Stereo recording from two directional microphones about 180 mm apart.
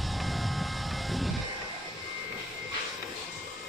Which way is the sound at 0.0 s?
Centre (ahead or behind).